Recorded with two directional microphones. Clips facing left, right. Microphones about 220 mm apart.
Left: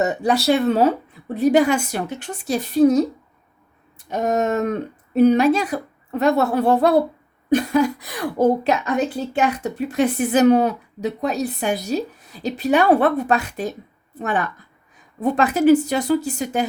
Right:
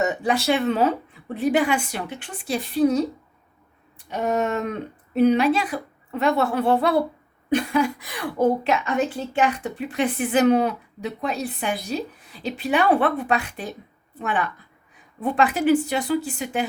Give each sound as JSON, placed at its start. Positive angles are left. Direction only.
{"t": 0.0, "sound": "a woman's voice", "side_deg": 35}
{"t": 4.1, "sound": "a woman's voice", "side_deg": 40}